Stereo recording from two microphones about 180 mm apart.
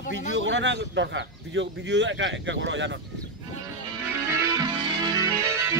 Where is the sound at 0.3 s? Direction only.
90° right.